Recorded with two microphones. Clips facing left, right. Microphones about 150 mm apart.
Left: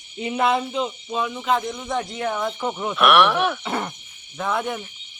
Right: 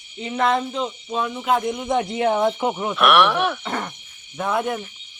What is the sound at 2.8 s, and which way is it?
Speech, centre (ahead or behind).